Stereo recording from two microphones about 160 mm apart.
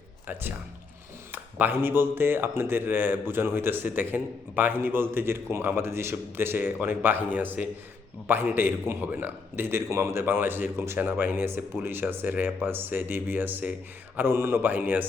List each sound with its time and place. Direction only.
1.3 s a man's voice: 10° right (ahead or behind)